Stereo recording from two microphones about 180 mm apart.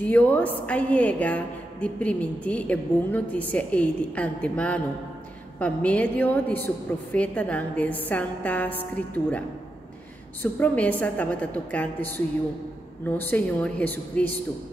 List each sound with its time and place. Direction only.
0.0 s a woman's voice: 10° left (ahead or behind)
10.4 s a woman's voice: 10° left (ahead or behind)